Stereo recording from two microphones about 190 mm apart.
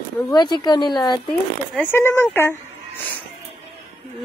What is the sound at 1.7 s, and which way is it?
Speech, 10° left (ahead or behind).